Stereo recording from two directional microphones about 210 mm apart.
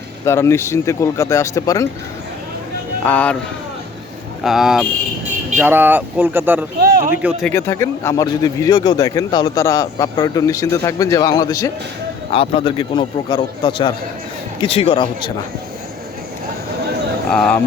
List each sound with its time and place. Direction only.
0.3 s speech: 15° left (ahead or behind)
3.0 s speech: 5° left (ahead or behind)
4.4 s speech: centre (ahead or behind)
6.7 s a sound: 50° right (ahead or behind)
7.2 s speech: 5° right (ahead or behind)
7.5 s a man's voice: 10° left (ahead or behind)
17.3 s speech: 5° left (ahead or behind)